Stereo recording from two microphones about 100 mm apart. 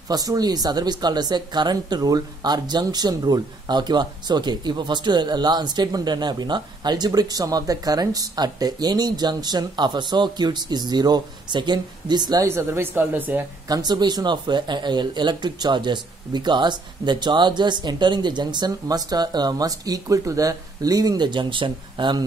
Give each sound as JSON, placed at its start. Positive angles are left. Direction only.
{"t": 0.1, "sound": "speech", "side_deg": -40}
{"t": 12.4, "sound": "a woman's voice", "side_deg": -25}
{"t": 13.7, "sound": "speech", "side_deg": -40}